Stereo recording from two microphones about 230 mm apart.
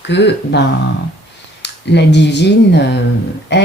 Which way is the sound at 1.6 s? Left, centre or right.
Left.